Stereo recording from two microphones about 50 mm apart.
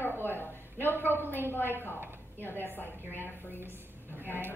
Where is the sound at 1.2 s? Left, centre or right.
Right.